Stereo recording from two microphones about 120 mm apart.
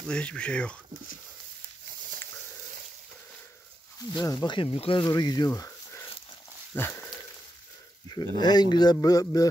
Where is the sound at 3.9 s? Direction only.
30° left (ahead or behind); by 5.0 s 50° left (ahead or behind).